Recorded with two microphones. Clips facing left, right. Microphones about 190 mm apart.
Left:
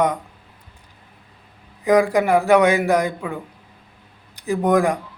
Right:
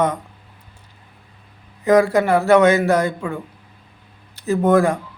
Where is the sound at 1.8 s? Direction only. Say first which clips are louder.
Right 2 dB; 15° left (ahead or behind).